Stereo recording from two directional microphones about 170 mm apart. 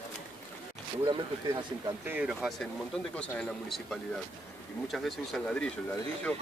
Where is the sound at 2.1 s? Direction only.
5° right (ahead or behind).